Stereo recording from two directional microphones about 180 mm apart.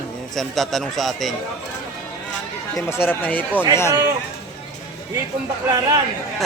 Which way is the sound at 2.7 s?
15° left (ahead or behind).